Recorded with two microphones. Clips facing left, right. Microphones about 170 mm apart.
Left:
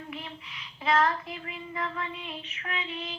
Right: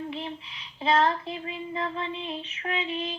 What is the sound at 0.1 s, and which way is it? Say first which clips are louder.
A woman's voice: right 5 dB; 25° right (ahead or behind).